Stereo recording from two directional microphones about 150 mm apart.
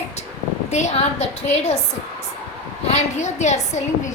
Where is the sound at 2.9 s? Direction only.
50° left (ahead or behind).